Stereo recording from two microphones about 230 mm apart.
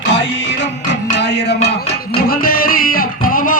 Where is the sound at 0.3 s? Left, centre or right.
Left.